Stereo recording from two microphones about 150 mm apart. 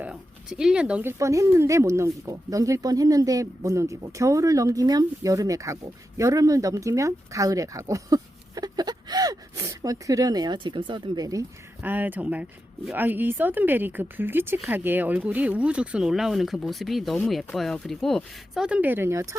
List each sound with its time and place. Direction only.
0.0 s speech: 5° right (ahead or behind)
1.2 s speech: 20° right (ahead or behind)
11.8 s speech: 10° right (ahead or behind)